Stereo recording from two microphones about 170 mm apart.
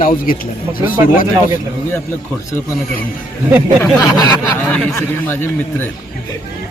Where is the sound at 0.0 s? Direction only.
55° left (ahead or behind).